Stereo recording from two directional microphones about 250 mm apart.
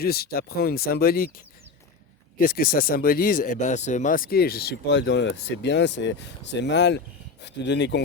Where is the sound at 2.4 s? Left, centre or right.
Left.